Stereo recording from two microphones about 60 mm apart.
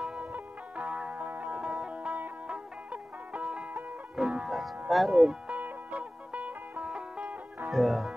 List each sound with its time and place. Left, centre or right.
0.0 s music: centre
4.5 s speech: centre
5.5 s music: right
7.7 s speech: centre